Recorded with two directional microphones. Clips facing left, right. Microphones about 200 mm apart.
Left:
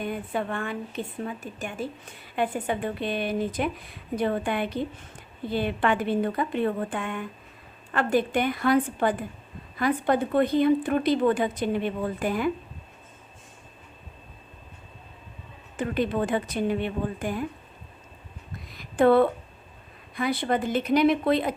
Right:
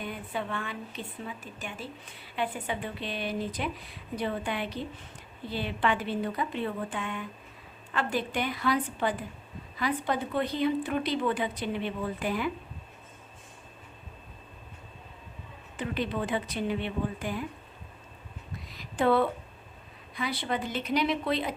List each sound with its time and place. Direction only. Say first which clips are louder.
0.0 s a woman's voice: left 6 dB; 50° left (ahead or behind)
15.8 s a woman's voice: left 6 dB; 50° left (ahead or behind)
18.7 s a sound: left 6 dB; 50° left (ahead or behind)
20.1 s a woman's voice: left 6 dB; 50° left (ahead or behind)